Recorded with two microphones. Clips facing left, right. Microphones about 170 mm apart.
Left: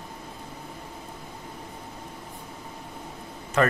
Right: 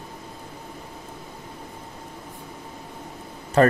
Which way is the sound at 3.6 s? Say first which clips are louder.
Right 5 dB; 35° right (ahead or behind).